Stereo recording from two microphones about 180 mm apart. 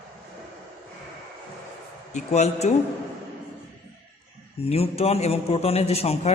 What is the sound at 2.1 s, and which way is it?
Speech, 40° left (ahead or behind).